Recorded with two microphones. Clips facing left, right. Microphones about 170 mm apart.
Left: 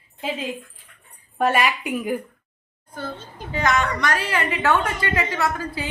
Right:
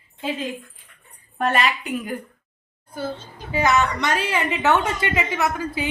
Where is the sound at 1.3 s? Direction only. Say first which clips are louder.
Left 1 dB; 10° left (ahead or behind).